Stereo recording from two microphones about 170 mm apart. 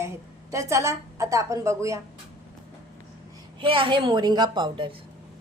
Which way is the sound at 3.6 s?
30° right (ahead or behind).